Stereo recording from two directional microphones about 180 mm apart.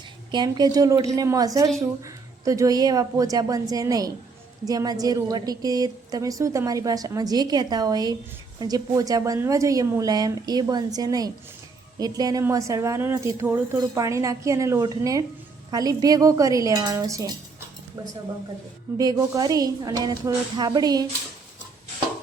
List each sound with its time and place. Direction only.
0.3 s a woman's voice: 25° right (ahead or behind)
18.9 s a woman's voice: 20° right (ahead or behind)